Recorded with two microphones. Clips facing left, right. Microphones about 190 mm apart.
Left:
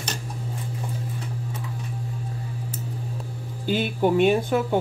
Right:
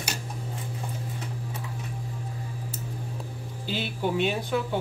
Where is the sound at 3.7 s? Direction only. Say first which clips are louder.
Left 7 dB; 50° left (ahead or behind).